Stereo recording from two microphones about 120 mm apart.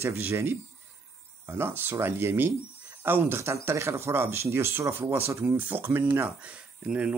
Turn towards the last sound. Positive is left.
turn(degrees=-10)  # may be behind; listen again after turning